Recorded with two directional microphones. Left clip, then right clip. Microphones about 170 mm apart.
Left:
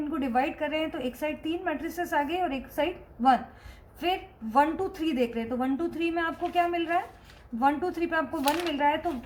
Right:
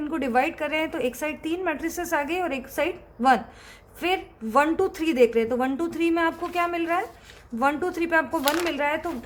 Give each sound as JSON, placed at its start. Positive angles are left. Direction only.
{"t": 0.1, "sound": "a woman's voice", "side_deg": -25}